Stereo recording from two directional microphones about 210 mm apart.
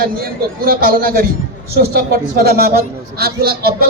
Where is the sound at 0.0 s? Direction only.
45° right (ahead or behind).